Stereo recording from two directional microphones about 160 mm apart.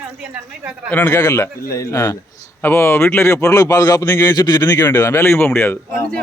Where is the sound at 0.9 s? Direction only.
10° left (ahead or behind).